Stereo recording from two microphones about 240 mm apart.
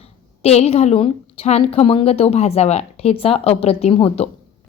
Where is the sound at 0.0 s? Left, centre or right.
Left.